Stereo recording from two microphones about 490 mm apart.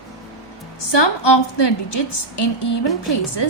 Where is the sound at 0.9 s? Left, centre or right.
Left.